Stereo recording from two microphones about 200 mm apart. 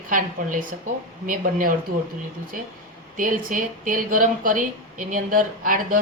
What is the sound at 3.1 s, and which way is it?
Speech, 40° right (ahead or behind).